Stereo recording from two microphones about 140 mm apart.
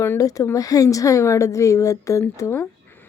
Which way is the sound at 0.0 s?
20° left (ahead or behind).